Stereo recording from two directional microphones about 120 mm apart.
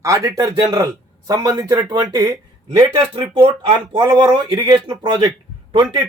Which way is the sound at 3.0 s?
45° right (ahead or behind).